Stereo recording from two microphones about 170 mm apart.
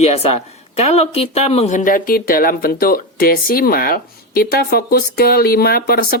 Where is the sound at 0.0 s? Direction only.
40° left (ahead or behind).